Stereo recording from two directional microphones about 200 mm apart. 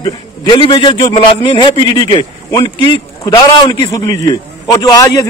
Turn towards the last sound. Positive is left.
turn(degrees=20)  # may be behind; listen again after turning